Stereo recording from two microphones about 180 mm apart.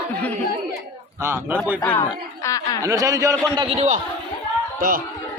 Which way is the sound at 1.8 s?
15° left (ahead or behind).